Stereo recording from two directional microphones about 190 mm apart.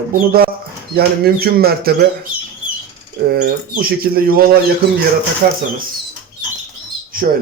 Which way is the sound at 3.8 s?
50° right (ahead or behind).